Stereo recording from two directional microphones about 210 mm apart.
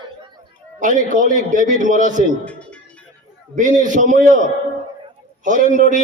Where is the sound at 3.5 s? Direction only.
35° right (ahead or behind).